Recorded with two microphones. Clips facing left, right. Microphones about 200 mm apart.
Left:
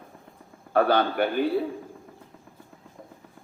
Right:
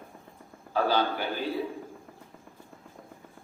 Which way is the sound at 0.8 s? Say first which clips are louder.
Left 5 dB; 60° left (ahead or behind).